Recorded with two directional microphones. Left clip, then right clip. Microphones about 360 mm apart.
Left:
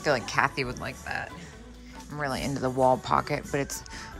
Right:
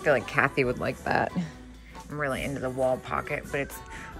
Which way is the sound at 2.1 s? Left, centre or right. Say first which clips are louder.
Right 1 dB; centre.